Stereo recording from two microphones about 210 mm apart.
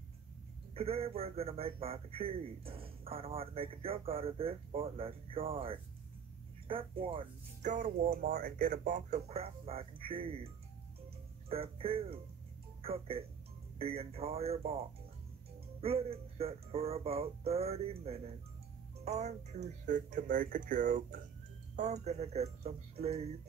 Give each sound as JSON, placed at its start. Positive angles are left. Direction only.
{"t": 0.7, "sound": "speech", "side_deg": -25}
{"t": 7.7, "sound": "speech", "side_deg": -40}
{"t": 15.8, "sound": "speech", "side_deg": -30}